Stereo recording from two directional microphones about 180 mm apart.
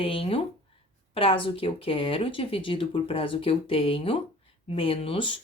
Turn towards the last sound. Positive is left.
turn(degrees=30)  # may be behind; listen again after turning